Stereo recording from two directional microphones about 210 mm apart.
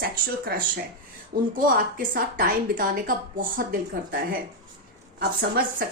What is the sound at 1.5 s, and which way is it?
A woman's voice, 40° right (ahead or behind).